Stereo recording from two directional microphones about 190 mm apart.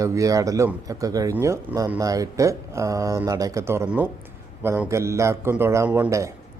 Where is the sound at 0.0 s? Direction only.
15° right (ahead or behind).